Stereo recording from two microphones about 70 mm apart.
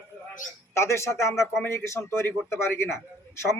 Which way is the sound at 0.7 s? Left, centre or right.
Left.